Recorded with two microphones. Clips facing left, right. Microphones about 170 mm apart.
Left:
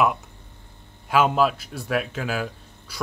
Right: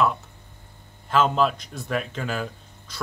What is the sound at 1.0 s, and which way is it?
Speech, 10° left (ahead or behind).